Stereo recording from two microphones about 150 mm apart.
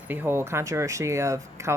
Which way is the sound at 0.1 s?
15° right (ahead or behind).